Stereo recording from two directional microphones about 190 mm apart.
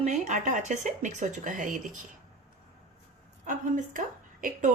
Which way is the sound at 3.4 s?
40° right (ahead or behind).